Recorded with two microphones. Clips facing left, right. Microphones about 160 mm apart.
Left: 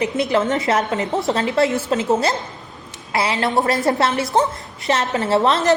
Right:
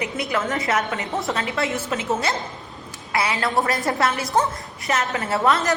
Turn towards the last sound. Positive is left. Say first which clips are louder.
# left 4 dB
turn(degrees=25)  # may be behind; listen again after turning